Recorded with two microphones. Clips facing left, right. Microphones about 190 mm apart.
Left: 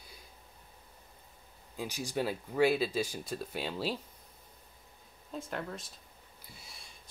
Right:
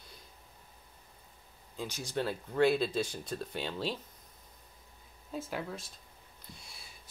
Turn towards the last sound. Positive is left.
turn(degrees=0)  # may be behind; listen again after turning